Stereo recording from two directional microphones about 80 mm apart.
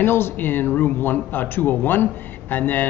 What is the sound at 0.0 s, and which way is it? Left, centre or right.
Speech, left.